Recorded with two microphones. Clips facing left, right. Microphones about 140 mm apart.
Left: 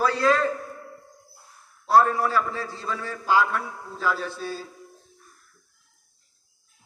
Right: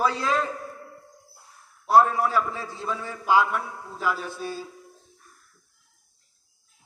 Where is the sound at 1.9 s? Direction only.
20° right (ahead or behind).